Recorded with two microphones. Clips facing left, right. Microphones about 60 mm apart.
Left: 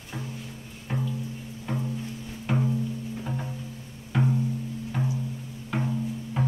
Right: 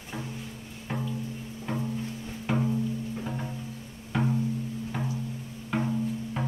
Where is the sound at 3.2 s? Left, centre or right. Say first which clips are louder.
Left 1 dB; centre.